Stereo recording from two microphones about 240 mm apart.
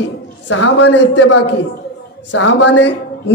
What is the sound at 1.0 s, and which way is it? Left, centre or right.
Speech, left.